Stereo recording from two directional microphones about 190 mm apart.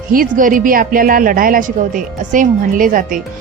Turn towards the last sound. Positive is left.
turn(degrees=-45)  # may be behind; listen again after turning